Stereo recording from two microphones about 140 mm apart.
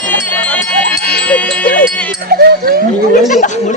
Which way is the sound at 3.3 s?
60° left (ahead or behind).